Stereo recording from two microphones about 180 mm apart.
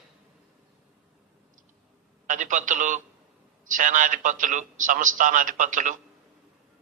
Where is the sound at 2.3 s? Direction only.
45° right (ahead or behind).